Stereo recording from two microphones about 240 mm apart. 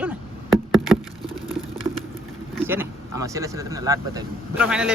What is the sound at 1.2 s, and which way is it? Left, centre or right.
Patter, centre.